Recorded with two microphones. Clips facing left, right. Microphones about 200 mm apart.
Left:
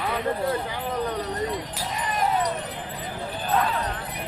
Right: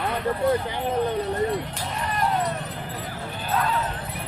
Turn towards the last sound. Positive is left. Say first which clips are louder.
# left 1 dB
turn(degrees=0)  # may be behind; listen again after turning